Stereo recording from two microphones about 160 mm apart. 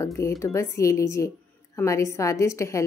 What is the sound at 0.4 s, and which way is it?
Speech, 20° left (ahead or behind).